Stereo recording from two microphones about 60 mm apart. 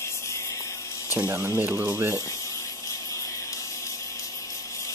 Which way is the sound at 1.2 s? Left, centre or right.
Right.